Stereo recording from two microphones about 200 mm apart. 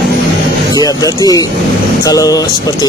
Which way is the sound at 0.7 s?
20° left (ahead or behind).